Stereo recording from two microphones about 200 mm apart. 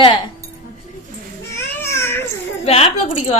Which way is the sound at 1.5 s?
15° left (ahead or behind).